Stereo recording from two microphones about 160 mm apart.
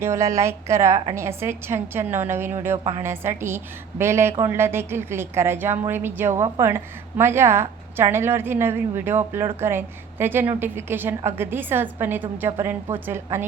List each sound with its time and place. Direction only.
0.0 s a woman's voice: 20° right (ahead or behind)